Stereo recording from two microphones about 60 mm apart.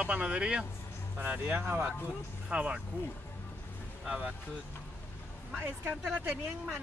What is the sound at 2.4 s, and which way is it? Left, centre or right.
Speech, centre.